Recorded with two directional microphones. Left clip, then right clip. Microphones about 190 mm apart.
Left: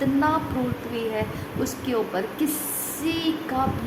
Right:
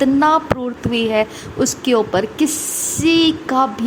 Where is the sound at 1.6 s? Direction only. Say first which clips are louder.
Right 10 dB; 35° right (ahead or behind).